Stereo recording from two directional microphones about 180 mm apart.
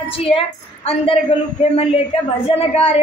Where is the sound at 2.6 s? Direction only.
35° left (ahead or behind).